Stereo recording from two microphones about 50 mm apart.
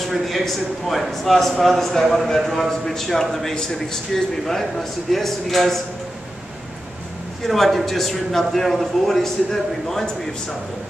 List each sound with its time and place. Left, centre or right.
0.0 s a man's voice: centre
7.4 s a man's voice: centre